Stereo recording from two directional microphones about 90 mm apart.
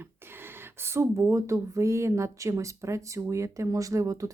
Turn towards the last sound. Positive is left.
turn(degrees=-35)  # may be behind; listen again after turning